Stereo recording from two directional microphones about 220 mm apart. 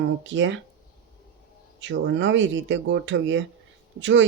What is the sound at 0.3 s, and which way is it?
Speech, 55° right (ahead or behind).